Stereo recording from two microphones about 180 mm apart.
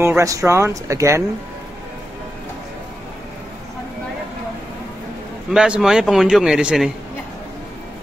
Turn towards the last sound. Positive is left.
turn(degrees=-5)  # may be behind; listen again after turning